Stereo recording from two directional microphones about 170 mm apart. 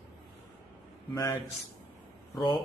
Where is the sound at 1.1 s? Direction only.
20° left (ahead or behind).